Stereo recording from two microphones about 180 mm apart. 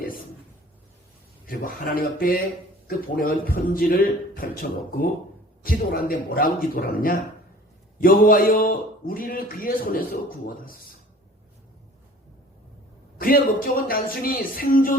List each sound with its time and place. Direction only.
1.5 s a man's voice: 55° left (ahead or behind)
5.6 s a man's voice: 55° left (ahead or behind)
13.1 s a man's voice: 55° left (ahead or behind)